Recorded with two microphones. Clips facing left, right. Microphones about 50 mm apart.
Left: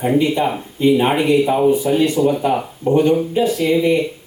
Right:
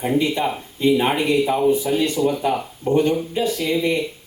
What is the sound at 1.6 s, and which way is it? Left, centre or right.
Speech, left.